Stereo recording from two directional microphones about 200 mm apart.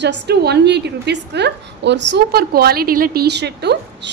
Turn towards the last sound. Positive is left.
turn(degrees=-55)  # may be behind; listen again after turning